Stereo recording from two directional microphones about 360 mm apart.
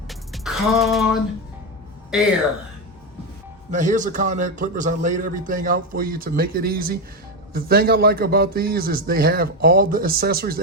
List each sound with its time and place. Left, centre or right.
0.1 s music: centre
2.1 s speech: centre
3.7 s a man's voice: right